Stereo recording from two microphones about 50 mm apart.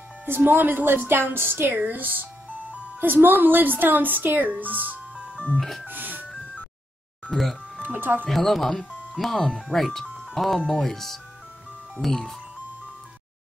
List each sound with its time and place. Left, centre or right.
0.2 s speech: right
1.8 s speech: right
5.1 s music: centre
5.6 s speech: centre
5.9 s music: right
7.2 s speech: centre
7.8 s speech: right
8.3 s speech: centre